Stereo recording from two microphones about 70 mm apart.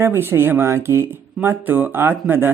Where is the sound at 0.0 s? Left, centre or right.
Right.